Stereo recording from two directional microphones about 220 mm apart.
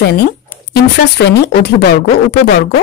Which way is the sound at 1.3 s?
45° left (ahead or behind).